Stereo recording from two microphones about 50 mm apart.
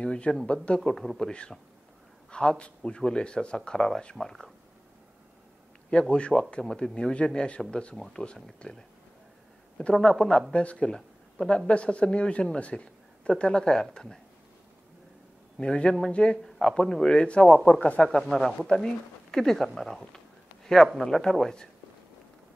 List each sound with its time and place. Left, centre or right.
0.0 s speech: centre
2.3 s speech: centre
5.9 s speech: centre
10.0 s speech: centre
10.9 s speech: centre
15.5 s speech: centre
16.4 s speech: centre; by 18.1 s left
18.3 s speech: centre